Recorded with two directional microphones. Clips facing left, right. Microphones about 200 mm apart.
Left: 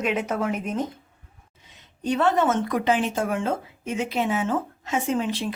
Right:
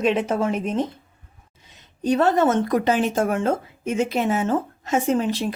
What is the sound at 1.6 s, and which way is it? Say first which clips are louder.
A woman's voice: right 4 dB; 40° right (ahead or behind).